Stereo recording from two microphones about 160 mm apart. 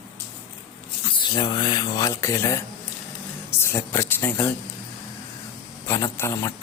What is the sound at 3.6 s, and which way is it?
Speech, 15° left (ahead or behind).